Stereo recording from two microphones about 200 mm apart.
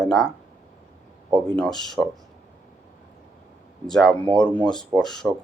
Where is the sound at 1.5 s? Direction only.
5° left (ahead or behind).